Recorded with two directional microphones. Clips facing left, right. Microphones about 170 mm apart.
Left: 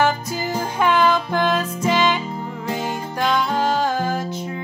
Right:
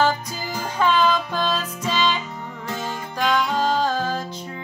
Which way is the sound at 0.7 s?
15° left (ahead or behind).